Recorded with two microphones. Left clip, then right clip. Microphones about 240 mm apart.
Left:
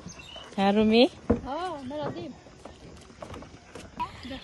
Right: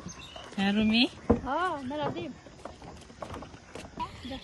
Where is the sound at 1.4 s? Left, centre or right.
Right.